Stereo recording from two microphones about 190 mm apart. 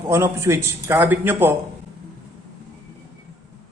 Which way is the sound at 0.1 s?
15° right (ahead or behind).